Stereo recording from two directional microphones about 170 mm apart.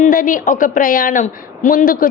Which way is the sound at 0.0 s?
50° left (ahead or behind).